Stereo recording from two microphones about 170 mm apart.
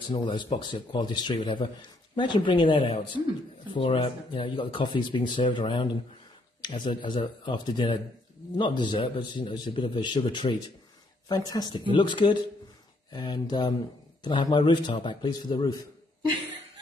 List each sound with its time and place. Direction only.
0.1 s speech: 30° left (ahead or behind)